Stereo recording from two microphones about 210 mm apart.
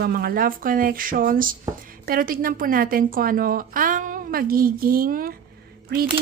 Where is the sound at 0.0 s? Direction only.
45° right (ahead or behind).